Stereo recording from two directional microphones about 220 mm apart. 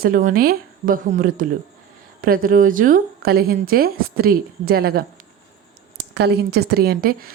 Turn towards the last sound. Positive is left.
turn(degrees=-40)  # may be behind; listen again after turning